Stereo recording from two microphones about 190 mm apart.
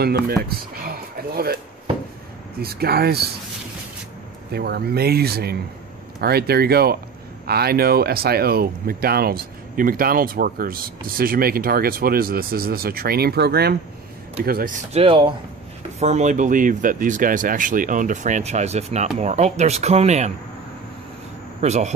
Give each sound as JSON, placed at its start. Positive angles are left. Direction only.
{"t": 0.5, "sound": "speech", "side_deg": -55}
{"t": 2.6, "sound": "speech", "side_deg": -55}
{"t": 4.5, "sound": "speech", "side_deg": -55}
{"t": 14.9, "sound": "speech", "side_deg": -30}
{"t": 21.5, "sound": "speech", "side_deg": -35}